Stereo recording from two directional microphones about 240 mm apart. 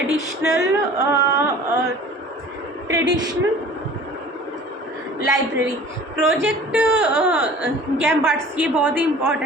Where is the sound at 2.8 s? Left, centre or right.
Centre.